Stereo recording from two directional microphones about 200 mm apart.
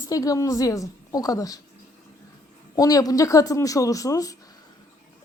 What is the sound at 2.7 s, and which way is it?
Speech, 20° left (ahead or behind).